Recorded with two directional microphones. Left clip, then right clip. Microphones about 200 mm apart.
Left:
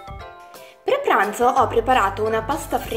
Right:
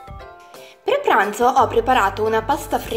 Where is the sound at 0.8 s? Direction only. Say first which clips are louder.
Right 2 dB; 25° right (ahead or behind).